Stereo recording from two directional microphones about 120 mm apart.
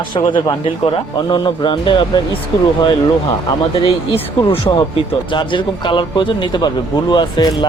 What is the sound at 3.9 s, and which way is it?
A man's voice, 50° left (ahead or behind).